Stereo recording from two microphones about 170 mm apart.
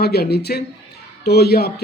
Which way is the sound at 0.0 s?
70° left (ahead or behind).